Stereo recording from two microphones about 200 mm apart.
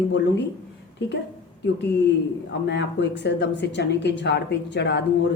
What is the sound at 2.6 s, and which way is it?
Speech, 60° left (ahead or behind).